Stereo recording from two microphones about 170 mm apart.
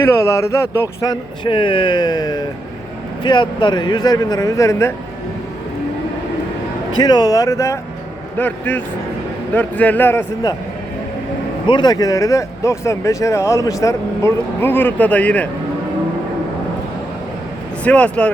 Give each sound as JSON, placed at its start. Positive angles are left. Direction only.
{"t": 0.0, "sound": "speech", "side_deg": 15}
{"t": 7.0, "sound": "speech", "side_deg": 25}
{"t": 11.6, "sound": "speech", "side_deg": 25}
{"t": 17.8, "sound": "speech", "side_deg": 5}